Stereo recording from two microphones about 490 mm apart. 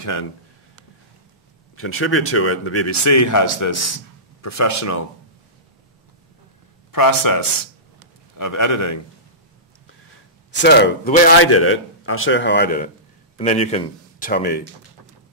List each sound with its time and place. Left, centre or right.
0.0 s speech: left
1.8 s speech: left
6.9 s speech: left
10.5 s speech: left